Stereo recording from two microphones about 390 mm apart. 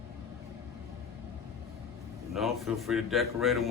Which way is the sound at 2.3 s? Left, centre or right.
Centre.